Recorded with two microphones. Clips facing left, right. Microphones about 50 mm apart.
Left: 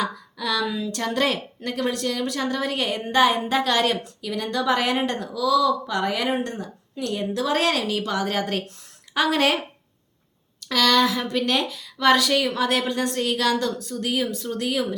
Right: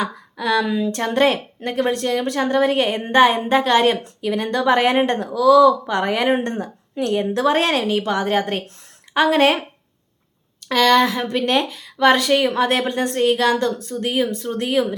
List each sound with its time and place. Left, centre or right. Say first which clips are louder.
0.0 s a woman's voice: right 4 dB; right
10.7 s a woman's voice: right 4 dB; right